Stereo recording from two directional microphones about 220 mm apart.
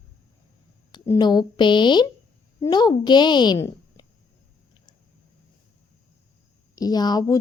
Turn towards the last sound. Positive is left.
turn(degrees=15)  # may be behind; listen again after turning